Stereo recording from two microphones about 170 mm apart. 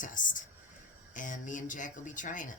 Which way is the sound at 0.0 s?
50° left (ahead or behind).